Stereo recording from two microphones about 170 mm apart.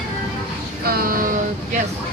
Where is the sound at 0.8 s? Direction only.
60° right (ahead or behind).